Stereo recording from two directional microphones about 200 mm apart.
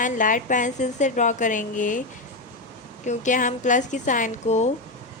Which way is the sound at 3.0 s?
40° left (ahead or behind).